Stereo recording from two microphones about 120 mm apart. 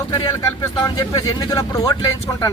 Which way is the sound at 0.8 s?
30° left (ahead or behind).